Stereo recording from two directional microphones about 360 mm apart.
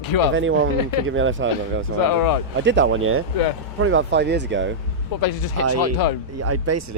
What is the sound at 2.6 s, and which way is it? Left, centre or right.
Speech, right.